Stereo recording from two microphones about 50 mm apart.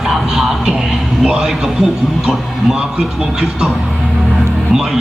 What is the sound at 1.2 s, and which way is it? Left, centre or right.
Speech, centre.